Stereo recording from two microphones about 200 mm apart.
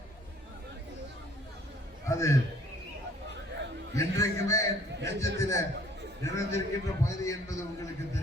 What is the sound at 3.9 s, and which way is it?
A man's voice, 15° left (ahead or behind).